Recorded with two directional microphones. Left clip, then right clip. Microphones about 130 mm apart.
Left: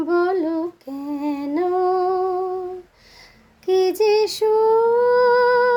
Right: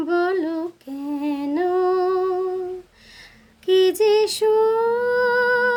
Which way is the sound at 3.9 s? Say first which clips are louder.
Even; 15° right (ahead or behind).